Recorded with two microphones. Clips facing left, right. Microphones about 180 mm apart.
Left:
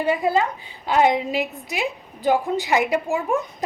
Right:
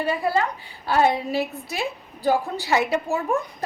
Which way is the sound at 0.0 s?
20° left (ahead or behind).